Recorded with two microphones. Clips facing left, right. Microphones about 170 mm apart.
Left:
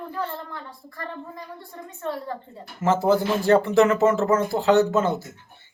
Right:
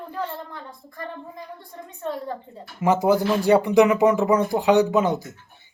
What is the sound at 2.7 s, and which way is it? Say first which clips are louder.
A child's voice: right 1 dB; 15° right (ahead or behind).